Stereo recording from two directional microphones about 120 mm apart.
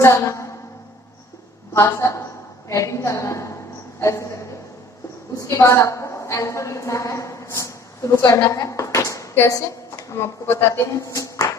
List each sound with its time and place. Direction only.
0.0 s a woman's voice: 25° left (ahead or behind)
1.7 s a woman's voice: 25° left (ahead or behind)
5.4 s a woman's voice: 25° left (ahead or behind)